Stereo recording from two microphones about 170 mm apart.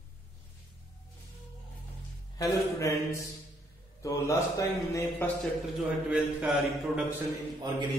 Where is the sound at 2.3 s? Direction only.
15° left (ahead or behind).